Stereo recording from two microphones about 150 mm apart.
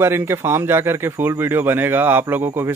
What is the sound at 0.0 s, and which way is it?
Speech, 15° right (ahead or behind).